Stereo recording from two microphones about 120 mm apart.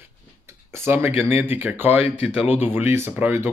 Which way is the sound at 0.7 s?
20° right (ahead or behind).